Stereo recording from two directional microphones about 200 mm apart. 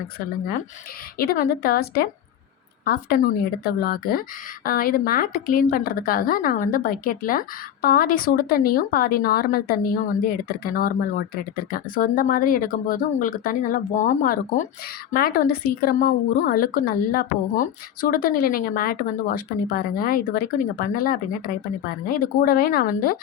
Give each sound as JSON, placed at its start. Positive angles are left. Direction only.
{"t": 1.2, "sound": "a woman's voice", "side_deg": 50}